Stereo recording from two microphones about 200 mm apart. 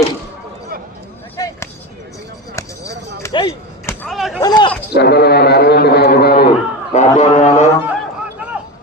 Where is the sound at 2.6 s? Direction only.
15° left (ahead or behind).